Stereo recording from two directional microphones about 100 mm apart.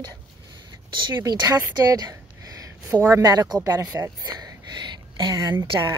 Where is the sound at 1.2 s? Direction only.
40° right (ahead or behind).